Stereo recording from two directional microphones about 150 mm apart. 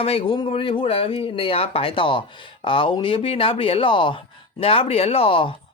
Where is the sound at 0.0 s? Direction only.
40° left (ahead or behind).